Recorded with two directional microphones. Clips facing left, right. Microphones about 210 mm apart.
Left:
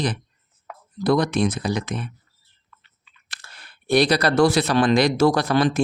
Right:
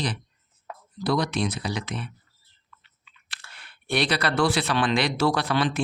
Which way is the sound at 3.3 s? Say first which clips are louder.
Left 2 dB; 40° left (ahead or behind).